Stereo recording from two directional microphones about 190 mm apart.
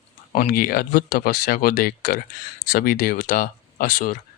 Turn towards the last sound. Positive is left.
turn(degrees=45)  # may be behind; listen again after turning